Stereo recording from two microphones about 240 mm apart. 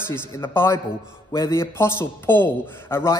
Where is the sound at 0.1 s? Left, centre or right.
Centre.